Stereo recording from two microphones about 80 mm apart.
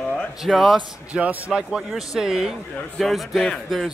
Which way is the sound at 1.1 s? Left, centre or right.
Centre.